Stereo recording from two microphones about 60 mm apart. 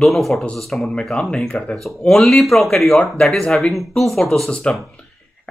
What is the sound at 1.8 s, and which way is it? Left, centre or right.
Speech, centre.